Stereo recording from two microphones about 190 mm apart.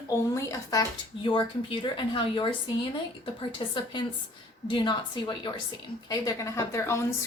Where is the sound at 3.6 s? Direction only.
25° left (ahead or behind).